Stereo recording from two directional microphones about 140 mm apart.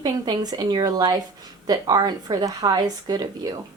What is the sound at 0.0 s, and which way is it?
A woman's voice, 30° right (ahead or behind).